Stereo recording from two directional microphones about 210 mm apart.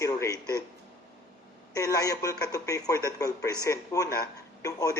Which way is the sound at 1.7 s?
15° left (ahead or behind).